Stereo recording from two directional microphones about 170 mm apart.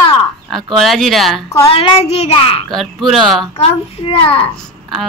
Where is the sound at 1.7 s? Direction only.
35° left (ahead or behind).